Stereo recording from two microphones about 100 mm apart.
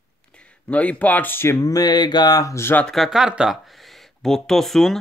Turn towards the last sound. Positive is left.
turn(degrees=5)  # may be behind; listen again after turning